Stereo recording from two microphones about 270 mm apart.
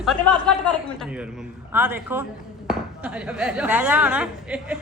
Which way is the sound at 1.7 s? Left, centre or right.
Centre.